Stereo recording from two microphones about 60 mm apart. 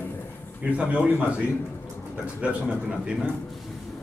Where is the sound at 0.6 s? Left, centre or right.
Right.